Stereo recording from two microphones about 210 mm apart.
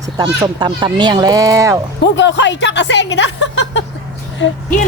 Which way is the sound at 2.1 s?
60° left (ahead or behind).